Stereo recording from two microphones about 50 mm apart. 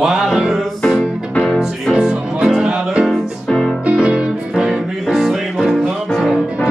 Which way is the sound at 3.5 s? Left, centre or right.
Centre.